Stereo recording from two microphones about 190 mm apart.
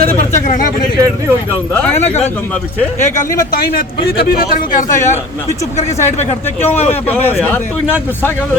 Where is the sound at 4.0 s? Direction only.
55° left (ahead or behind).